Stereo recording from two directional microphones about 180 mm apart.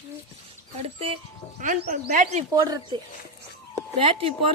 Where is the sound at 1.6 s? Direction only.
45° right (ahead or behind).